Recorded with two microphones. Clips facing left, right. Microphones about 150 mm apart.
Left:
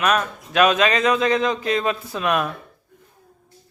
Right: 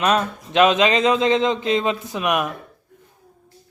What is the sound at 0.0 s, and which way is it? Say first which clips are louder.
Speech: right 1 dB; 25° right (ahead or behind).